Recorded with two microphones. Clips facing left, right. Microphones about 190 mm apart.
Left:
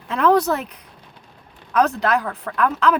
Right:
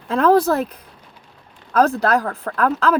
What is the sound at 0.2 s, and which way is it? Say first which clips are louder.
Speech: right 2 dB; 35° right (ahead or behind).